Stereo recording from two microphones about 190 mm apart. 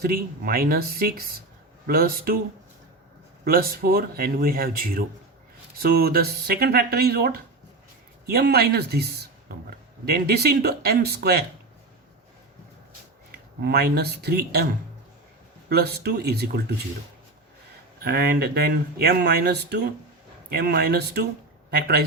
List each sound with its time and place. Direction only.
0.0 s speech: 50° right (ahead or behind)
3.4 s speech: 50° right (ahead or behind)
13.3 s speech: 55° right (ahead or behind)
15.7 s speech: 55° right (ahead or behind)
18.0 s speech: 55° right (ahead or behind)